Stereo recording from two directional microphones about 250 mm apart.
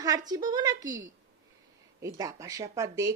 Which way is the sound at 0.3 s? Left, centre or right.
Centre.